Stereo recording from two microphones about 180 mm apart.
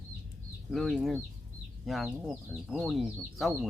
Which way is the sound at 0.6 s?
Centre (ahead or behind).